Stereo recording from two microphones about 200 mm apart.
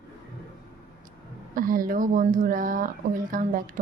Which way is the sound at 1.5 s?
45° right (ahead or behind).